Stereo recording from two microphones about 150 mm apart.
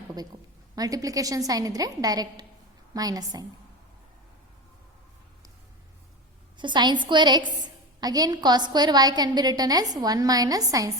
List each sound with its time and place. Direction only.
0.8 s a woman's voice: 25° right (ahead or behind)
6.6 s a woman's voice: 30° right (ahead or behind)